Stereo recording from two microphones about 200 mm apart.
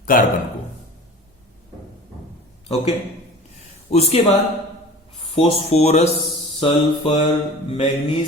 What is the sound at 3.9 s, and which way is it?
Speech, 30° left (ahead or behind).